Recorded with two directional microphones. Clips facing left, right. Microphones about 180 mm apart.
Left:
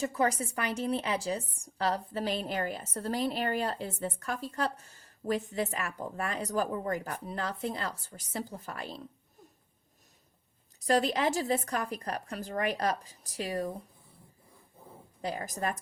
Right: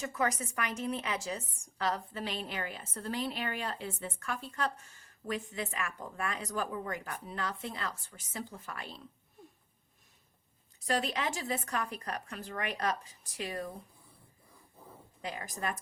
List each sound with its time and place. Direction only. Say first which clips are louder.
0.0 s a woman's voice: left 4 dB; 30° left (ahead or behind)
10.8 s a woman's voice: left 6 dB; 40° left (ahead or behind)
15.2 s a woman's voice: left 4 dB; 40° left (ahead or behind)